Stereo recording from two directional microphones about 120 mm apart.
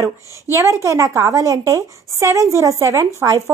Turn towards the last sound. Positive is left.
turn(degrees=-25)  # may be behind; listen again after turning